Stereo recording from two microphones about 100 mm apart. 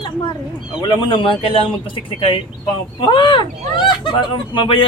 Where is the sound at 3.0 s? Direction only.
50° left (ahead or behind).